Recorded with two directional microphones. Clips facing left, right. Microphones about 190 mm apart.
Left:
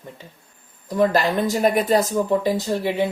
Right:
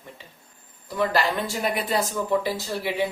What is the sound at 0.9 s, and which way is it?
Speech, 45° left (ahead or behind).